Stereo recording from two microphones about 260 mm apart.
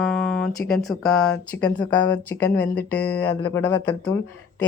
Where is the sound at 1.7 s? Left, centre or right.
Centre.